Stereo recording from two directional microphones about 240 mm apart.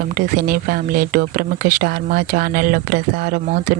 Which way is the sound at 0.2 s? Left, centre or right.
Right.